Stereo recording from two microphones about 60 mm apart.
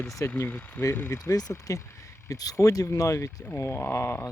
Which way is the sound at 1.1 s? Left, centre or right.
Left.